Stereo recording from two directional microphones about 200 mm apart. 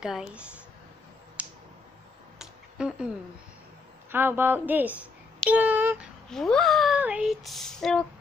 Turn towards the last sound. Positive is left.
turn(degrees=0)  # may be behind; listen again after turning